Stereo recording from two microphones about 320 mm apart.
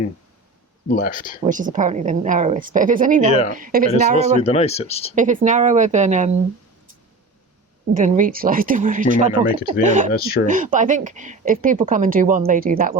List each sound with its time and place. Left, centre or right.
0.9 s speech: left
1.5 s speech: right
4.4 s speech: centre
5.1 s speech: right
7.9 s speech: right
9.3 s speech: centre
10.0 s speech: right